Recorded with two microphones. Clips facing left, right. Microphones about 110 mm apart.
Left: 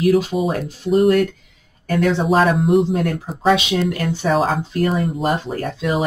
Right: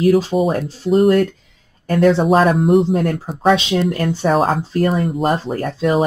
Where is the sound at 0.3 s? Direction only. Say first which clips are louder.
Right 4 dB; 30° right (ahead or behind).